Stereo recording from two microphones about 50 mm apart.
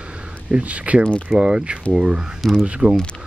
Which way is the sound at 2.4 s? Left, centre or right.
Centre.